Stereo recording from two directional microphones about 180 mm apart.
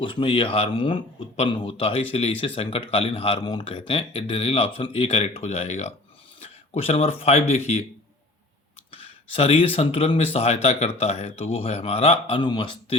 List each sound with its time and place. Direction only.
0.0 s speech: 30° left (ahead or behind)
8.9 s speech: 30° left (ahead or behind)